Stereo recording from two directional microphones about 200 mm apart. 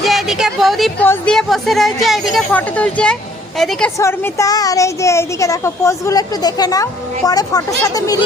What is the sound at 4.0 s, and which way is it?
Speech, 15° left (ahead or behind).